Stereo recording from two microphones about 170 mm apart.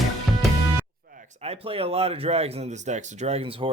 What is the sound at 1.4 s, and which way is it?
Speech, 35° right (ahead or behind).